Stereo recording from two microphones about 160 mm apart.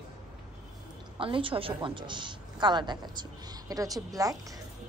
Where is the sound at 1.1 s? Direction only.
35° right (ahead or behind).